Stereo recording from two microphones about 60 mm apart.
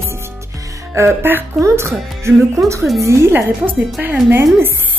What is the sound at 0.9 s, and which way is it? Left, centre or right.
Speech, right.